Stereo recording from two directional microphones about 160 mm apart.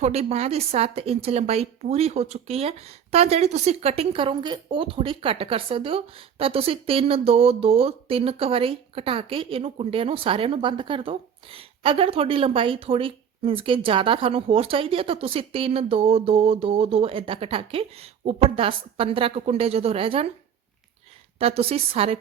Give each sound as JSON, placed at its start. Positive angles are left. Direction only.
{"t": 0.0, "sound": "speech", "side_deg": -40}
{"t": 21.3, "sound": "speech", "side_deg": -40}